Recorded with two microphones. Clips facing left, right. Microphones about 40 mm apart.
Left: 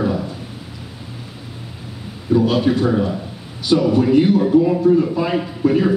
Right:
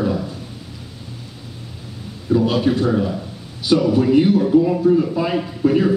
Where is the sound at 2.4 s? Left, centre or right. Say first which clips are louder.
Left 1 dB; centre.